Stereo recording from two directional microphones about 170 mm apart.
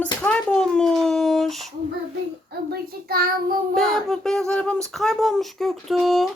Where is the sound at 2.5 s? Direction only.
70° right (ahead or behind).